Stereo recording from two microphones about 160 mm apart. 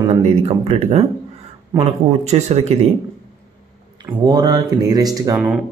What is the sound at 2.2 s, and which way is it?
Speech, 40° right (ahead or behind).